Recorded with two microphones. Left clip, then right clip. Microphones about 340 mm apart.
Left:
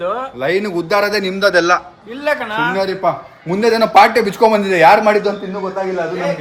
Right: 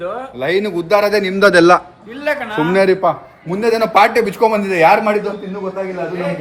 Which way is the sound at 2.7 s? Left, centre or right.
Right.